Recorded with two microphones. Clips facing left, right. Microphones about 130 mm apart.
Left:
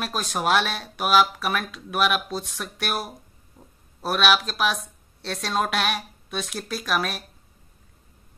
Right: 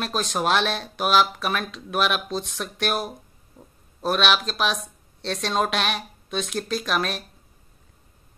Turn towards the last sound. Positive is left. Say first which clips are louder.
# right 1 dB
turn(degrees=5)  # may be behind; listen again after turning